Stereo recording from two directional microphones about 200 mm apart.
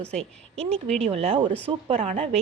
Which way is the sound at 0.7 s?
5° left (ahead or behind).